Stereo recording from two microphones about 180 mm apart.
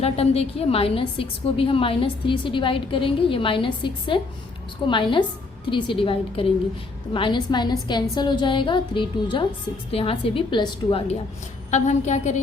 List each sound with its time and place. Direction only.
0.0 s a woman's voice: 35° left (ahead or behind)
11.7 s a woman's voice: 40° left (ahead or behind)